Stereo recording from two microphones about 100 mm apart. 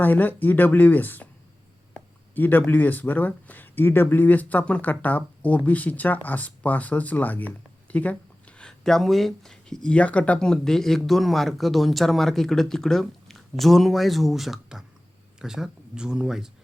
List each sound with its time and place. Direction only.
0.0 s speech: 20° left (ahead or behind)
2.3 s speech: 20° left (ahead or behind); by 16.5 s 5° right (ahead or behind)